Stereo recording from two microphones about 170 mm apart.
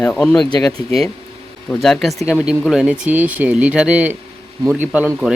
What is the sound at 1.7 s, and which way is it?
Speech, 5° left (ahead or behind).